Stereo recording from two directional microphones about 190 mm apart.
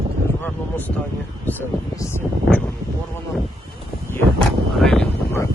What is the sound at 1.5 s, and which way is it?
Speech, 10° left (ahead or behind).